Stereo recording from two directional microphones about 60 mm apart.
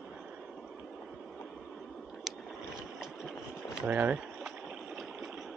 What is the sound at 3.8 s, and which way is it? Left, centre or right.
Speech, right.